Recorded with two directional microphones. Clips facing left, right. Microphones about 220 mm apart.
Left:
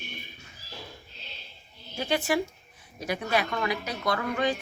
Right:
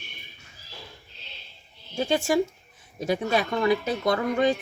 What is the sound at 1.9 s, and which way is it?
A woman's voice, 25° right (ahead or behind).